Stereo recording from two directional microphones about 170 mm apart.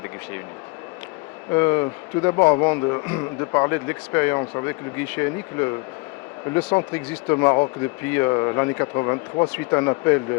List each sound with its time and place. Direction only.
1.5 s a man's voice: 15° left (ahead or behind)
6.7 s a man's voice: 15° left (ahead or behind)